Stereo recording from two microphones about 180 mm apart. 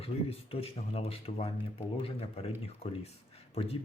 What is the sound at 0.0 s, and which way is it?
Speech, 30° left (ahead or behind).